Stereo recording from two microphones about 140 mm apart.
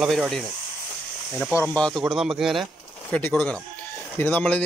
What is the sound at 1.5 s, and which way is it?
Speech, 20° left (ahead or behind).